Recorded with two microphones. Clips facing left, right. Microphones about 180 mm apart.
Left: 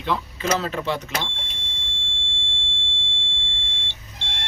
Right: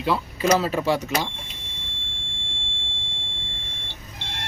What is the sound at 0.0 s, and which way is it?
Speech, 10° right (ahead or behind).